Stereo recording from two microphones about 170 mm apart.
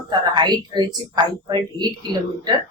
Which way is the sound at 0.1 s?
25° right (ahead or behind).